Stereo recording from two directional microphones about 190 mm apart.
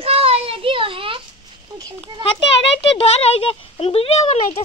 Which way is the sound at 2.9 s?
30° left (ahead or behind).